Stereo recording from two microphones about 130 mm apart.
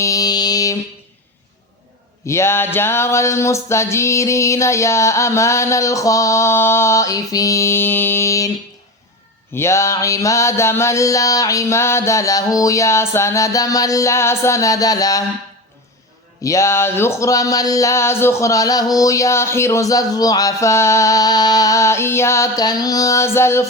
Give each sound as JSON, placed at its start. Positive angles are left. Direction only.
{"t": 0.0, "sound": "music", "side_deg": 25}
{"t": 2.2, "sound": "music", "side_deg": 20}
{"t": 9.6, "sound": "music", "side_deg": 20}
{"t": 16.4, "sound": "music", "side_deg": 25}